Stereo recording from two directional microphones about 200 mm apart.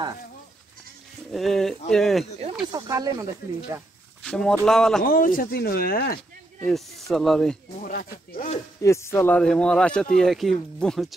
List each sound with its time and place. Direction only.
1.3 s speech: centre (ahead or behind)
2.6 s speech: 20° right (ahead or behind)
4.2 s speech: 5° left (ahead or behind)
5.0 s speech: 45° left (ahead or behind)
6.6 s speech: centre (ahead or behind)
7.8 s speech: 45° left (ahead or behind)
8.8 s speech: 15° left (ahead or behind)